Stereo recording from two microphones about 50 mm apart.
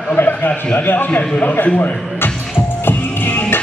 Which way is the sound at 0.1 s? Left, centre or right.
Left.